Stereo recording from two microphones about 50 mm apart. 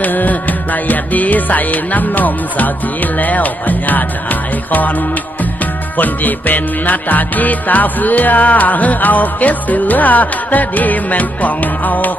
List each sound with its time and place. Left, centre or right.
0.0 s music: left